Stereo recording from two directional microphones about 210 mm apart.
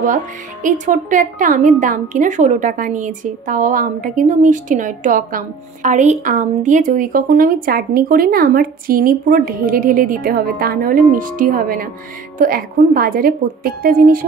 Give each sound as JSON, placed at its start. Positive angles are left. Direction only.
{"t": 0.0, "sound": "a woman's voice", "side_deg": -40}